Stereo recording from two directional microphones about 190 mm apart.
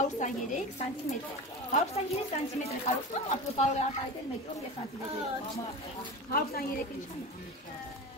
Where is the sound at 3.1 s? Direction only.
35° left (ahead or behind).